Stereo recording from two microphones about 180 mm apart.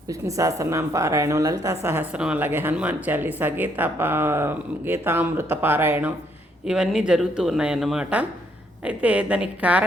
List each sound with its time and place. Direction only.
0.1 s a woman's voice: 20° right (ahead or behind)